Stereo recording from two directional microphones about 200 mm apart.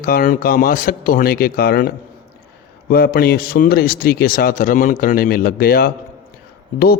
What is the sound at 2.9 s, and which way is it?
Speech, 50° left (ahead or behind).